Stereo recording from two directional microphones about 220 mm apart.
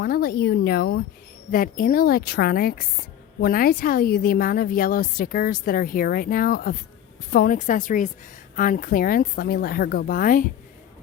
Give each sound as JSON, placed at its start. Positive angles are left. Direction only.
{"t": 0.0, "sound": "a woman's voice", "side_deg": 45}